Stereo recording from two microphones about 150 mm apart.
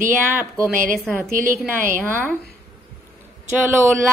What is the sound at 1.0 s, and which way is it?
Speech, 5° left (ahead or behind).